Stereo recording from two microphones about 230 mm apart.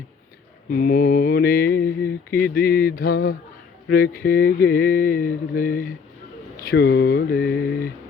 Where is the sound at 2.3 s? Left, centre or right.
Left.